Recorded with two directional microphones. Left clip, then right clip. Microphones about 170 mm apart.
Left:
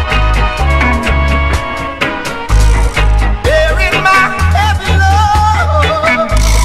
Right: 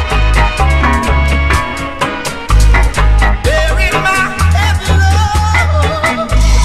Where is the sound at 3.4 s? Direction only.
15° right (ahead or behind).